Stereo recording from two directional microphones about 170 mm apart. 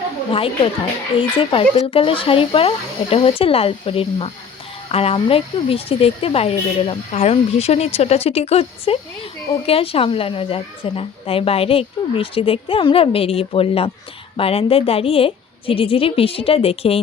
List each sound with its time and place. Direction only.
0.3 s a woman's voice: 30° left (ahead or behind)